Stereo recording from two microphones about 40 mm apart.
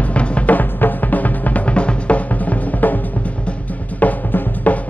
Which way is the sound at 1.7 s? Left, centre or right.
Left.